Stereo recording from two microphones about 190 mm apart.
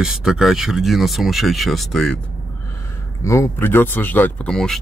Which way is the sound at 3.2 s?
15° left (ahead or behind).